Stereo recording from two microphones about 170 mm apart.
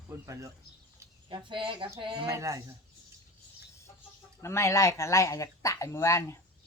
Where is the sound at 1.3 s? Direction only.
30° right (ahead or behind).